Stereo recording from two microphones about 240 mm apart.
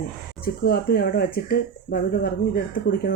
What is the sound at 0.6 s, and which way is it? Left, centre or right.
Speech, left.